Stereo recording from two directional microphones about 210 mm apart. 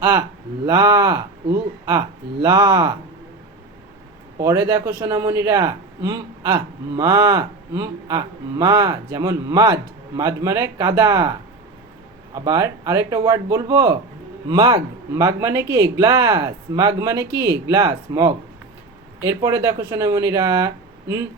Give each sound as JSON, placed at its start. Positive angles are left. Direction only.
{"t": 0.0, "sound": "a man's voice", "side_deg": -15}
{"t": 4.4, "sound": "a man's voice", "side_deg": -15}